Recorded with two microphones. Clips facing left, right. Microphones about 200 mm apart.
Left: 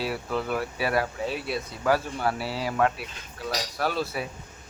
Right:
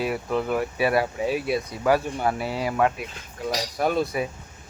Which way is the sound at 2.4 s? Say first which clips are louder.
Right 3 dB; 45° right (ahead or behind).